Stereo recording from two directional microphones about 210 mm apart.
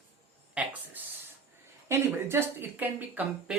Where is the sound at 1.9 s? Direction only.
10° right (ahead or behind).